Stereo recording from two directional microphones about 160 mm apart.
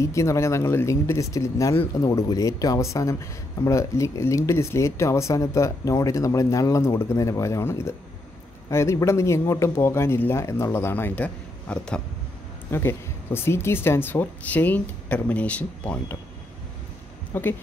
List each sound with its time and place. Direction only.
0.0 s speech: 20° left (ahead or behind)
17.3 s a woman's voice: 15° left (ahead or behind)